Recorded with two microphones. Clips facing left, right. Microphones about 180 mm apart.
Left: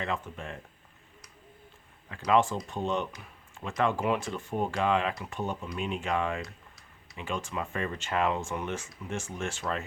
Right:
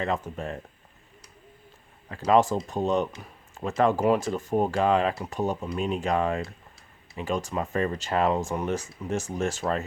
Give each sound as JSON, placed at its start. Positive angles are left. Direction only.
{"t": 0.0, "sound": "speech", "side_deg": -40}
{"t": 2.0, "sound": "speech", "side_deg": -40}